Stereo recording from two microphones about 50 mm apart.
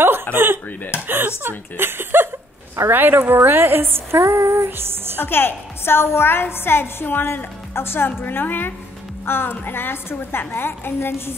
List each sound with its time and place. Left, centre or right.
0.3 s a sound: right
1.0 s a woman's voice: right
5.2 s a woman's voice: left